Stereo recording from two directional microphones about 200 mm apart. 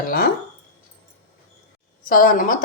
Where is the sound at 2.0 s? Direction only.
45° left (ahead or behind).